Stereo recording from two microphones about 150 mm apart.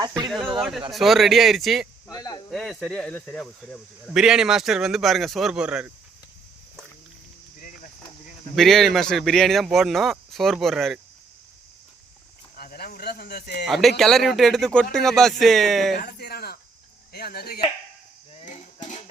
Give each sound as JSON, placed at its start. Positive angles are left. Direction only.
{"t": 0.3, "sound": "speech", "side_deg": 0}
{"t": 2.0, "sound": "speech", "side_deg": 25}
{"t": 2.5, "sound": "speech", "side_deg": 0}
{"t": 8.5, "sound": "speech", "side_deg": 0}
{"t": 12.5, "sound": "a sound", "side_deg": 90}
{"t": 13.7, "sound": "speech", "side_deg": 0}
{"t": 16.0, "sound": "speech", "side_deg": 90}
{"t": 18.4, "sound": "a sound", "side_deg": 55}